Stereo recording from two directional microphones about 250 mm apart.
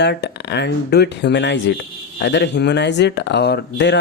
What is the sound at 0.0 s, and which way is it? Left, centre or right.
Speech, left.